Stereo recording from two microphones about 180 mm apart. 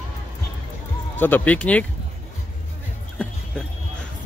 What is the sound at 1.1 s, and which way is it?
Speech, 10° left (ahead or behind).